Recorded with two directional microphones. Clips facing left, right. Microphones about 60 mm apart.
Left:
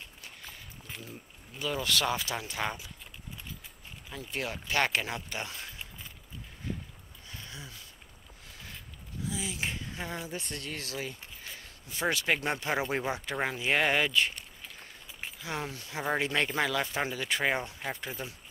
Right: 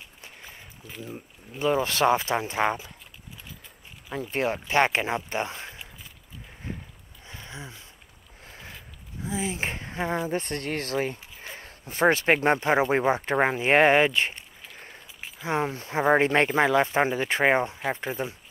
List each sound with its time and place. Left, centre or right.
0.2 s a sound: right
1.1 s speech: right
4.1 s speech: right
7.2 s a sound: right
9.2 s speech: right
15.4 s speech: right